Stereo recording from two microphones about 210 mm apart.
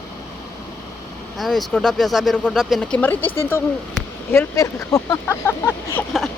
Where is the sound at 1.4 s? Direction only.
Centre (ahead or behind).